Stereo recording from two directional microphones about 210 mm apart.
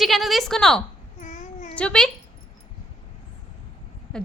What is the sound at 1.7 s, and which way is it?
Speech, 5° left (ahead or behind).